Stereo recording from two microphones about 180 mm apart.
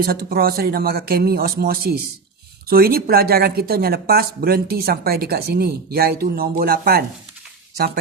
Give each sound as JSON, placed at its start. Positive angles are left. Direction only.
{"t": 0.0, "sound": "speech", "side_deg": -55}